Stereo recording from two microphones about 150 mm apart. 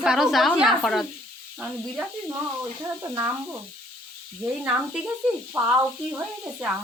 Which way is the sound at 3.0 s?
20° right (ahead or behind).